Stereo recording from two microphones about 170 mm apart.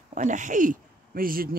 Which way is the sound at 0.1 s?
45° right (ahead or behind).